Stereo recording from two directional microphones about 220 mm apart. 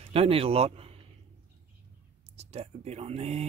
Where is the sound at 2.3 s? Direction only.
30° right (ahead or behind).